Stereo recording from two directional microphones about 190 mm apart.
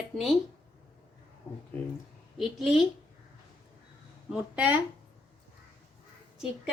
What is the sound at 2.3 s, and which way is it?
Speech, centre (ahead or behind).